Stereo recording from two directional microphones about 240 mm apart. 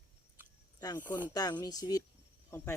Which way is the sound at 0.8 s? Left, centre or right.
Centre.